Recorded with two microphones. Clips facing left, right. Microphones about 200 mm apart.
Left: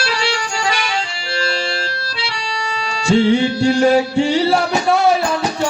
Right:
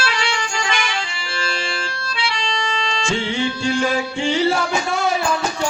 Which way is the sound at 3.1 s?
40° left (ahead or behind).